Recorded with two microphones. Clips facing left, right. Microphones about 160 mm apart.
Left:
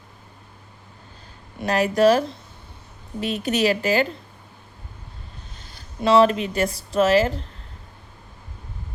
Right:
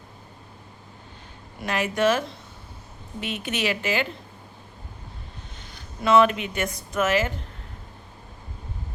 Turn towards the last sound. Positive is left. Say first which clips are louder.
# left 5 dB
turn(degrees=35)  # may be behind; listen again after turning